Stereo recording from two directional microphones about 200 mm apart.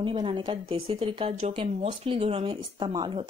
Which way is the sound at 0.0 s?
25° right (ahead or behind).